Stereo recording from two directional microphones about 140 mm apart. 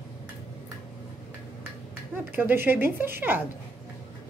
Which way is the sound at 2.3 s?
15° right (ahead or behind).